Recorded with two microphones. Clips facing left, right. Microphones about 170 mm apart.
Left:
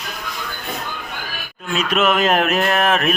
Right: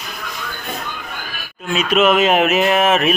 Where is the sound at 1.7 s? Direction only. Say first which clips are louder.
Right 3 dB; centre (ahead or behind).